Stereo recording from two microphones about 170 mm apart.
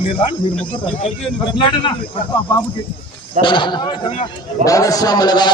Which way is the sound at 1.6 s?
30° left (ahead or behind).